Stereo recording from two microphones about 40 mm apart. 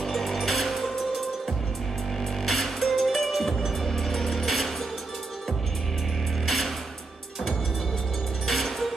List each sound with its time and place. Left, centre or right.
0.0 s music: centre
2.4 s music: centre
6.4 s music: centre
8.5 s music: centre